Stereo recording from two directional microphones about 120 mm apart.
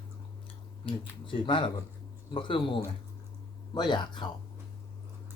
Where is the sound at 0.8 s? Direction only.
45° left (ahead or behind).